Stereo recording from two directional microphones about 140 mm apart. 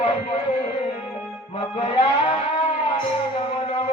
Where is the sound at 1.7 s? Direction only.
40° left (ahead or behind).